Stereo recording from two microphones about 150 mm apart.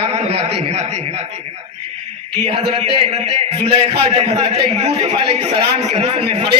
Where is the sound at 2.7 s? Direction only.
45° right (ahead or behind).